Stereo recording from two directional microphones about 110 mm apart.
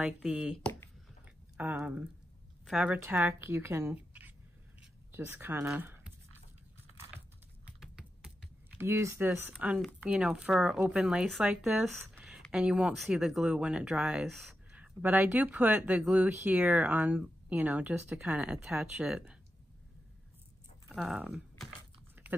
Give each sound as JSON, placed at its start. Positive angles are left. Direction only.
{"t": 0.0, "sound": "speech", "side_deg": -10}
{"t": 1.2, "sound": "a sound", "side_deg": -15}
{"t": 2.6, "sound": "speech", "side_deg": -5}
{"t": 3.0, "sound": "speech", "side_deg": -15}
{"t": 7.8, "sound": "typing", "side_deg": -5}
{"t": 8.7, "sound": "speech", "side_deg": -25}
{"t": 14.8, "sound": "speech", "side_deg": -15}
{"t": 20.9, "sound": "speech", "side_deg": -5}